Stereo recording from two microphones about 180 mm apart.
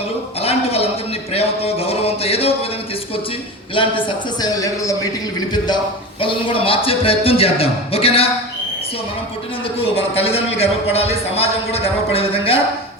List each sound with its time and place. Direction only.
0.4 s a sound: 35° left (ahead or behind)
1.3 s music: 35° left (ahead or behind)
3.8 s a man's voice: 25° left (ahead or behind)
9.7 s speech: 30° left (ahead or behind)